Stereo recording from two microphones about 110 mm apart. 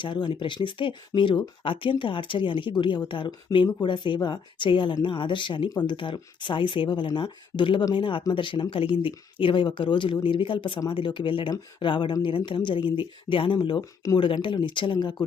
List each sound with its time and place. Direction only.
0.0 s speech: 45° left (ahead or behind)